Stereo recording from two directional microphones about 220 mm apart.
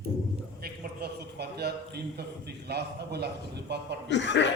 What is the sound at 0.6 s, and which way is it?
A man's voice, 45° right (ahead or behind).